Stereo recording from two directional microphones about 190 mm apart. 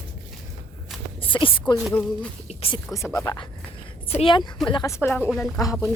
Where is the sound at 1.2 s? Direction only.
25° left (ahead or behind).